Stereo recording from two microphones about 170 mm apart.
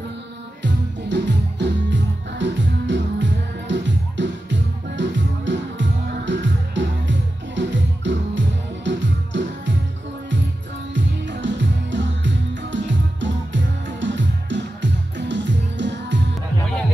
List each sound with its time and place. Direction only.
0.6 s music: 90° right
11.0 s music: 90° right